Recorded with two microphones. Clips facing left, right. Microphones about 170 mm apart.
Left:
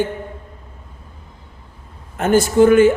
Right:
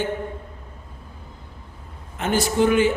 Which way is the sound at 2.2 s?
50° left (ahead or behind).